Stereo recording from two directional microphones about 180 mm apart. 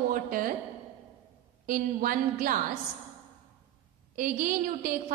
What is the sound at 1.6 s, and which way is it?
Speech, 50° right (ahead or behind).